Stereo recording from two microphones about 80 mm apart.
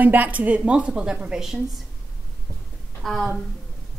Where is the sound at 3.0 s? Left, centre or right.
Centre.